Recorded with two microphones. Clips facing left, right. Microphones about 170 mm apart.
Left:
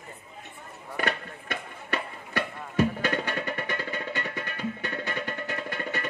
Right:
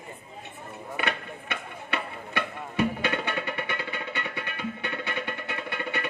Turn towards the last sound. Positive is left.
turn(degrees=40)  # may be behind; listen again after turning